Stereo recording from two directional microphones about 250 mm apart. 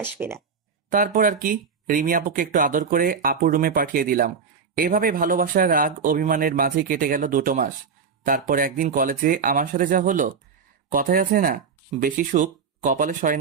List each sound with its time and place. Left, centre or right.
0.0 s speech: centre
0.8 s speech: right